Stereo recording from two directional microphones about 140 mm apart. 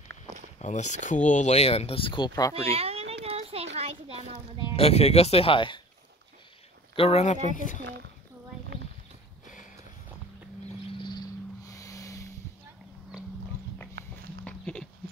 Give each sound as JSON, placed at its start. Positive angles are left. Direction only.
{"t": 0.6, "sound": "speech", "side_deg": 55}
{"t": 2.5, "sound": "a sound", "side_deg": -45}
{"t": 4.6, "sound": "speech", "side_deg": 45}
{"t": 7.0, "sound": "speech", "side_deg": 50}
{"t": 7.5, "sound": "speech", "side_deg": 65}
{"t": 11.0, "sound": "a sound", "side_deg": 30}
{"t": 14.4, "sound": "dog", "side_deg": 5}